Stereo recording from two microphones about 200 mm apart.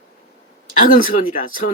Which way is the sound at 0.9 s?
45° left (ahead or behind).